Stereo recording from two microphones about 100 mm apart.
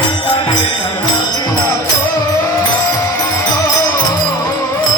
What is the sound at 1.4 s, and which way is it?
Music, 35° left (ahead or behind).